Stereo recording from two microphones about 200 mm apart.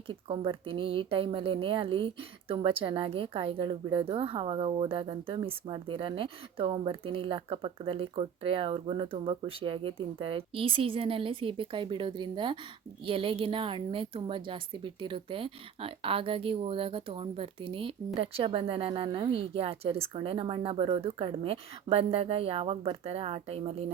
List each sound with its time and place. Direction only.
0.1 s speech: 25° right (ahead or behind)